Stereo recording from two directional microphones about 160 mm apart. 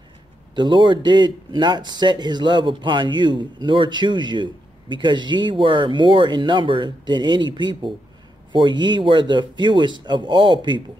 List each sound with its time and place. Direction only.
0.6 s speech: 30° right (ahead or behind)